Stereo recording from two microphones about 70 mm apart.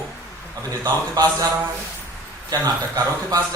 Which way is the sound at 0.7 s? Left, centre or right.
Right.